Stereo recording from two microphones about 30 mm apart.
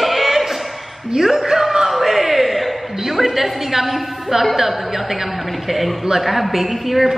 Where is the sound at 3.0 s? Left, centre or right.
Centre.